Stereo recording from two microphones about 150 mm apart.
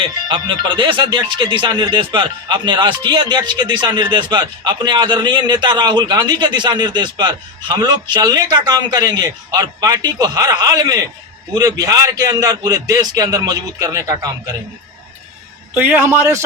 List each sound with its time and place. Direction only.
0.0 s speech: 35° right (ahead or behind)
15.7 s a man's voice: 10° right (ahead or behind)